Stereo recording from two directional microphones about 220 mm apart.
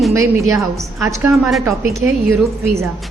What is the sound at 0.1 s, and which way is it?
Speech, 15° right (ahead or behind).